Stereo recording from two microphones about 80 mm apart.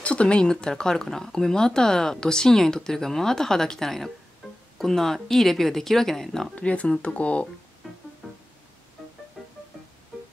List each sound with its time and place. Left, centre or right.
0.0 s speech: centre
6.5 s speech: centre
7.8 s music: centre